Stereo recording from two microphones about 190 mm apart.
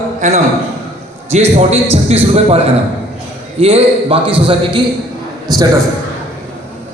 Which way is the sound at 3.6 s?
30° right (ahead or behind).